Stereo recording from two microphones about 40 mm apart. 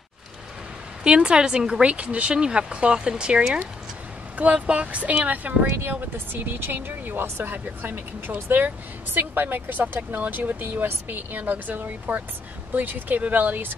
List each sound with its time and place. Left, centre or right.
1.0 s speech: right
4.6 s speech: right
6.1 s speech: right